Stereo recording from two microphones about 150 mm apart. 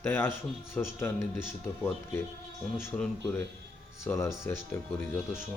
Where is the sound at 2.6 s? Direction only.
Centre (ahead or behind).